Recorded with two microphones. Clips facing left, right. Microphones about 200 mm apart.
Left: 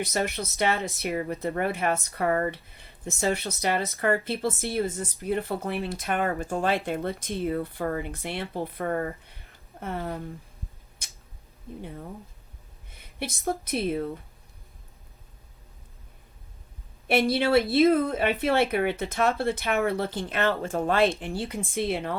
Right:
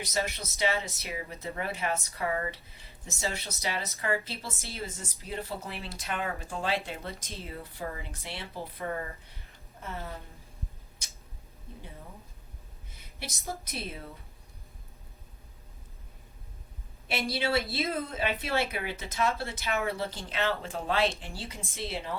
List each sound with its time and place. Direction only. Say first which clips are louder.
0.0 s speech: left 5 dB; 55° left (ahead or behind)
12.9 s a woman's voice: left 8 dB; 55° left (ahead or behind)
17.1 s speech: left 8 dB; 55° left (ahead or behind)